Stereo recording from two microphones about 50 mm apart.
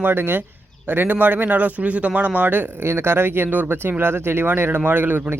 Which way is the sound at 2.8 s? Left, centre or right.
Right.